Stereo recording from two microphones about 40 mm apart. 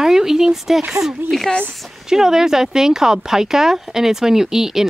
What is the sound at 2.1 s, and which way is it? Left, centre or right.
Speech, centre.